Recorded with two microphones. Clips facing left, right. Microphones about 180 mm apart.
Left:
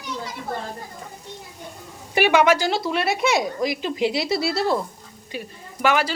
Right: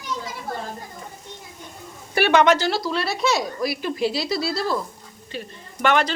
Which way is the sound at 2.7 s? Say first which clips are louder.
Left 1 dB; 20° left (ahead or behind).